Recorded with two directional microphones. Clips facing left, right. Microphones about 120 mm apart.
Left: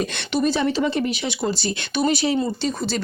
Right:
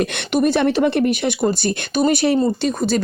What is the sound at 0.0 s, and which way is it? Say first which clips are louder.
Speech: right 4 dB; 60° right (ahead or behind).